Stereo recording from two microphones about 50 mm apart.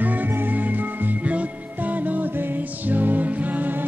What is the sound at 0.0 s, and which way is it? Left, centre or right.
Music, right.